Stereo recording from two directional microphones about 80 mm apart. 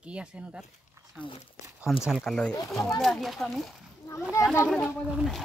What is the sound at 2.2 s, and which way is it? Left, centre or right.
Speech, centre.